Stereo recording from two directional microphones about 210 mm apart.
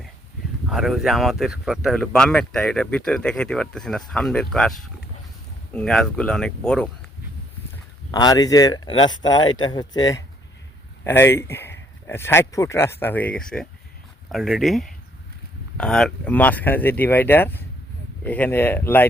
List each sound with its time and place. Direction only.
0.7 s speech: centre (ahead or behind)
8.1 s speech: 20° left (ahead or behind)